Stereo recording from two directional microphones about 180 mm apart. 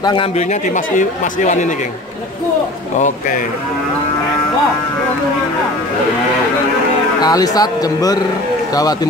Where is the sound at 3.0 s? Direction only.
45° left (ahead or behind).